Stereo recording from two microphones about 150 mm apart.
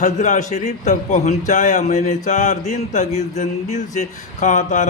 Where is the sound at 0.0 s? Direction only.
55° left (ahead or behind).